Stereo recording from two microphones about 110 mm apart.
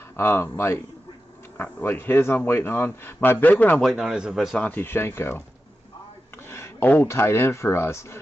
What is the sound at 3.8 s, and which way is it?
Speech, centre (ahead or behind).